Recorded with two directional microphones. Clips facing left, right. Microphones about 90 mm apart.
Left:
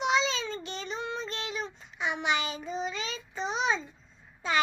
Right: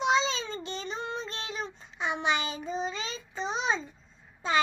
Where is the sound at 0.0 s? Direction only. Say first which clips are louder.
Right 1 dB; 30° right (ahead or behind).